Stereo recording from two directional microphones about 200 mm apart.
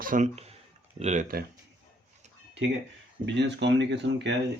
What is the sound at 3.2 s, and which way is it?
Speech, 60° right (ahead or behind).